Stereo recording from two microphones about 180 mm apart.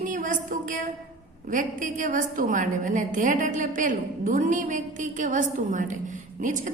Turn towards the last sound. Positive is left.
turn(degrees=-45)  # may be behind; listen again after turning